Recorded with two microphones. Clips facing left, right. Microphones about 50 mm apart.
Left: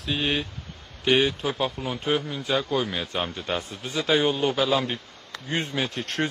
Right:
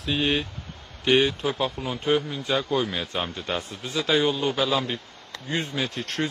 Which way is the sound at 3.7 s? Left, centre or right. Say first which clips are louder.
Even; left.